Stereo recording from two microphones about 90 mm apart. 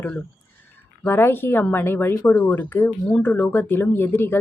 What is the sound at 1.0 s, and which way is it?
Speech, 25° left (ahead or behind).